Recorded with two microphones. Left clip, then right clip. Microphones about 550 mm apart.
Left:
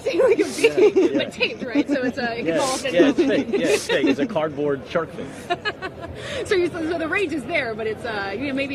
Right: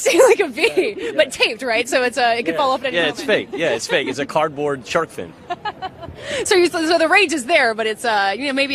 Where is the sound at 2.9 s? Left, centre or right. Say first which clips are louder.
Even; right.